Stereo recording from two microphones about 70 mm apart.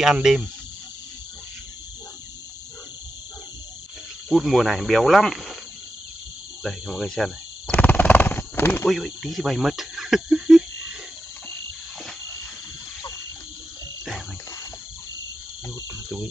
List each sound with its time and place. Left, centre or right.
0.0 s speech: centre
4.3 s speech: centre
6.6 s speech: centre
7.7 s a sound: left
8.8 s cricket: centre